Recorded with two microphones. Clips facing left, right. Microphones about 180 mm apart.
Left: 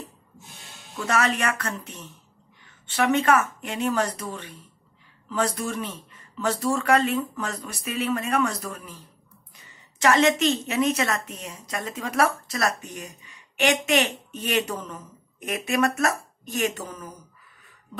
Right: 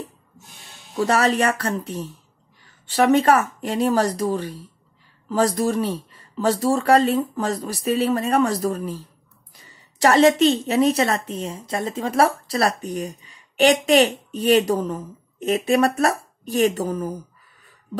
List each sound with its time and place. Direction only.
0.9 s a woman's voice: 35° right (ahead or behind)